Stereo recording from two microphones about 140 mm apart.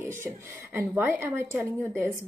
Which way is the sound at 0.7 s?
15° right (ahead or behind).